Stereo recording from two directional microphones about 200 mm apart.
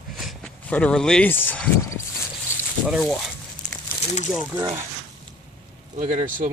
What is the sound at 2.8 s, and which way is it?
Speech, 5° right (ahead or behind).